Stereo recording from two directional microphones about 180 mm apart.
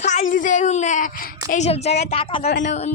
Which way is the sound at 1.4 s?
40° left (ahead or behind).